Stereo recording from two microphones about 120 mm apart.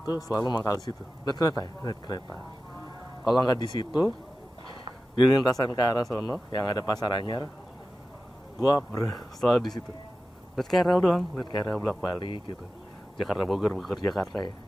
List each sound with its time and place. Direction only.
0.0 s speech: 35° left (ahead or behind)
3.4 s speech: 40° left (ahead or behind)
4.8 s a sound: 40° left (ahead or behind)
5.5 s speech: 30° left (ahead or behind)
8.5 s speech: 30° left (ahead or behind)
9.1 s speech: centre (ahead or behind)
12.2 s speech: 45° left (ahead or behind)
13.2 s speech: centre (ahead or behind)